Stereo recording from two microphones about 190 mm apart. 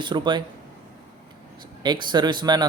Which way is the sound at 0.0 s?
25° right (ahead or behind).